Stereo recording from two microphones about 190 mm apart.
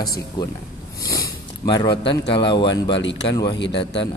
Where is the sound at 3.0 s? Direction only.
70° left (ahead or behind).